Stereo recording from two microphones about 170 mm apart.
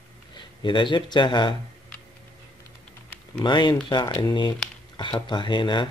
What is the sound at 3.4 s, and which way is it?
Speech, 25° left (ahead or behind).